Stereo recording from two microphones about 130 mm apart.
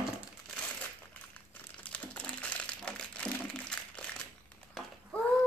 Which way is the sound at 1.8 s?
10° left (ahead or behind).